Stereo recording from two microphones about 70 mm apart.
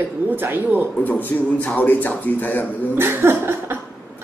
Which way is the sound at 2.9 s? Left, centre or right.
Right.